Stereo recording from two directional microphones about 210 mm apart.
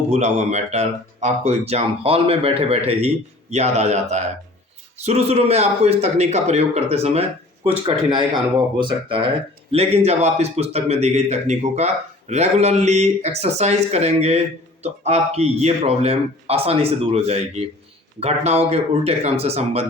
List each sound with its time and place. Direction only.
0.1 s speech: 35° right (ahead or behind)